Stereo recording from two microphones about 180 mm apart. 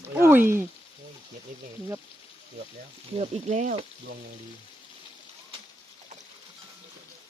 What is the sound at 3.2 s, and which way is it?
Speech, 40° right (ahead or behind).